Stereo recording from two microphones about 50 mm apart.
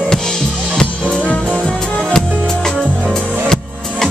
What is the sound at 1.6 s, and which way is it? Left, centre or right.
Music, centre.